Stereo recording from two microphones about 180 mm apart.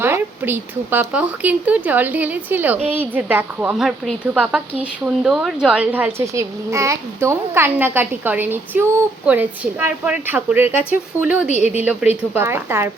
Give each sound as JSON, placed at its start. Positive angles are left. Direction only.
{"t": 0.0, "sound": "a woman's voice", "side_deg": -10}
{"t": 11.4, "sound": "a woman's voice", "side_deg": 40}
{"t": 12.3, "sound": "a woman's voice", "side_deg": -10}